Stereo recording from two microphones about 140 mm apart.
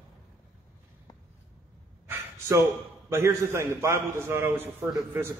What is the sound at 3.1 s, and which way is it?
A man's voice, 20° right (ahead or behind).